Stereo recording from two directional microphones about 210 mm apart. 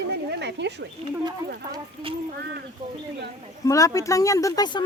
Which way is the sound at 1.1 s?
20° right (ahead or behind).